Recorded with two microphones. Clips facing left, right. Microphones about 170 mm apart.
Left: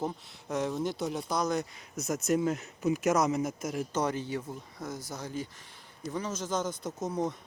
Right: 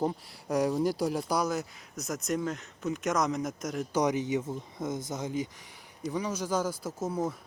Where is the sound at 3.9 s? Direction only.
15° right (ahead or behind).